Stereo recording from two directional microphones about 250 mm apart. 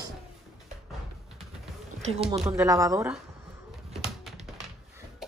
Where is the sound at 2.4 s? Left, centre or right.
Centre.